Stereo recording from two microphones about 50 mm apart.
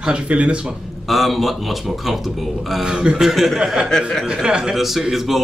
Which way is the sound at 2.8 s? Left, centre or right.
Centre.